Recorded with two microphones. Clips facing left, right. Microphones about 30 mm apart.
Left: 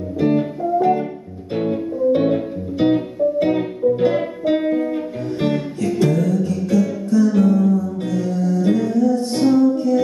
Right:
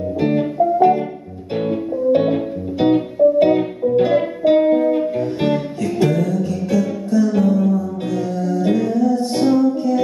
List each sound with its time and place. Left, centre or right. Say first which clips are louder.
0.2 s music: right 1 dB; centre
2.1 s music: right 1 dB; centre